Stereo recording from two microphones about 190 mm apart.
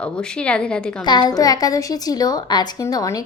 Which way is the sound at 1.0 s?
20° left (ahead or behind).